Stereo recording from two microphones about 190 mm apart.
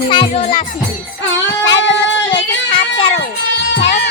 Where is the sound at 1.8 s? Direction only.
70° left (ahead or behind).